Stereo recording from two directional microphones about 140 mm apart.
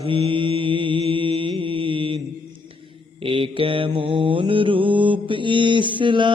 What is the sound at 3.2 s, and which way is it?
Mantra, 40° right (ahead or behind).